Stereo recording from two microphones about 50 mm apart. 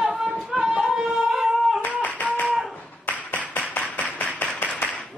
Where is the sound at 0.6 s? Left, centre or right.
Right.